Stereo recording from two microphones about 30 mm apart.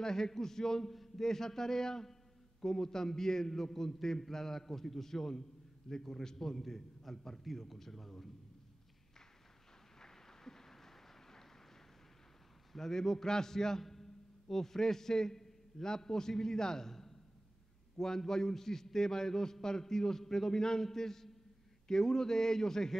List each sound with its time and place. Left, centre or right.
0.0 s a man's voice: centre
9.9 s a sound: centre
12.7 s a man's voice: centre